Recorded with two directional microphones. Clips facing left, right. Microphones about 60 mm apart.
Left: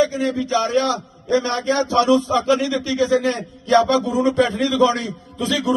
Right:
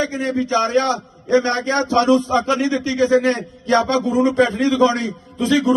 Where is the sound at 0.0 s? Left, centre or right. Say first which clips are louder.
Left 1 dB; right.